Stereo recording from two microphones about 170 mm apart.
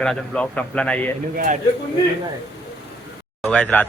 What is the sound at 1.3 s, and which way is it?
Speech, 50° right (ahead or behind).